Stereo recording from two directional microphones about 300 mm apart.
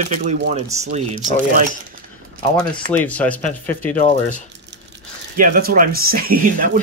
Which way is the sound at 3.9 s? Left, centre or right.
Left.